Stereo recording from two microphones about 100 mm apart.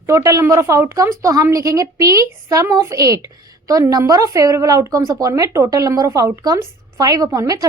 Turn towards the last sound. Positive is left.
turn(degrees=-40)  # may be behind; listen again after turning